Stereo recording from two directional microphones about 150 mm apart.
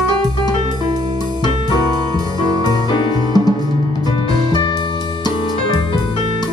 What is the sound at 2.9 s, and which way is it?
Music, 30° left (ahead or behind).